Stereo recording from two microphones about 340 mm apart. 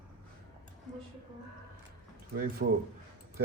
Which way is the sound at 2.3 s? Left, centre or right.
Right.